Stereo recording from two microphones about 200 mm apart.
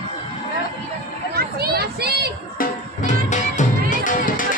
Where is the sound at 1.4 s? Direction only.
50° right (ahead or behind).